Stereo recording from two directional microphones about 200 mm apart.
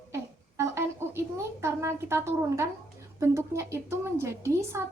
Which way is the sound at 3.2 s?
15° right (ahead or behind).